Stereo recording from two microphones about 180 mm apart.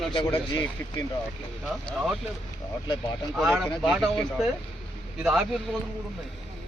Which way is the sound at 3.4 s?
Centre (ahead or behind).